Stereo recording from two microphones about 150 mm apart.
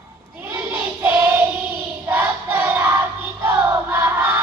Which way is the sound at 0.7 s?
15° right (ahead or behind).